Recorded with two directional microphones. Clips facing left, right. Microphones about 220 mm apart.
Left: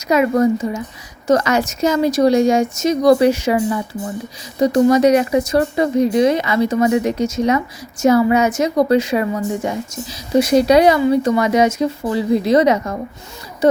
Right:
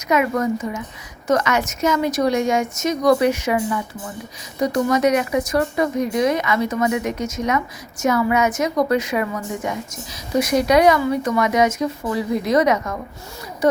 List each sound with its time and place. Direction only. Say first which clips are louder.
0.1 s a woman's voice: left 5 dB; 30° left (ahead or behind)